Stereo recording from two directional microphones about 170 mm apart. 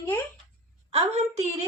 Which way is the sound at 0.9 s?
40° right (ahead or behind).